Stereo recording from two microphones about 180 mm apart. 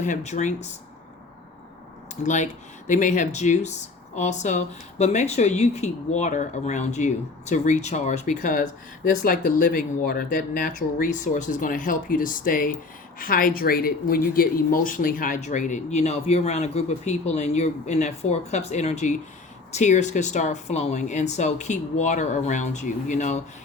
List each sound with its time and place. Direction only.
0.0 s speech: 40° left (ahead or behind)
2.2 s speech: 45° left (ahead or behind)